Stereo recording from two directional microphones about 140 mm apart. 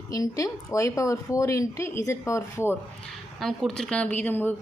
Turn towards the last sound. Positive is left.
turn(degrees=15)  # may be behind; listen again after turning